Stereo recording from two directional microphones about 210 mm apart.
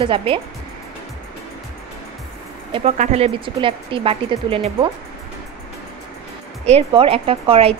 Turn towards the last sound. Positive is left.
turn(degrees=-25)  # may be behind; listen again after turning